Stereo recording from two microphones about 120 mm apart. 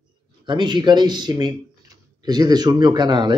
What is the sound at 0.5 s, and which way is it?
Speech, 40° right (ahead or behind).